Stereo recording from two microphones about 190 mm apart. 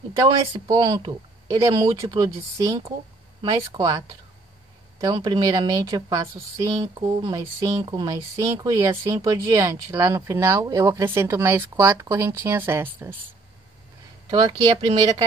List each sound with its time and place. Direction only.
0.1 s a woman's voice: 20° right (ahead or behind)
14.3 s speech: 30° right (ahead or behind)